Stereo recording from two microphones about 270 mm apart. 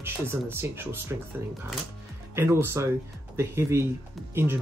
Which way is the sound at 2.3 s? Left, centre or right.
Centre.